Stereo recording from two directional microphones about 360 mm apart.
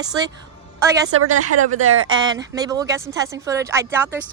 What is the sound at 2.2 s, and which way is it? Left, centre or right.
Speech, centre.